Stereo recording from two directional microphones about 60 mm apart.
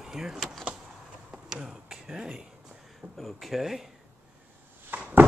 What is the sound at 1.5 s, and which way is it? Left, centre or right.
Speech, centre.